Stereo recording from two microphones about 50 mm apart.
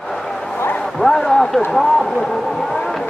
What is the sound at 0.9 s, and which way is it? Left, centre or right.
A man's voice, centre.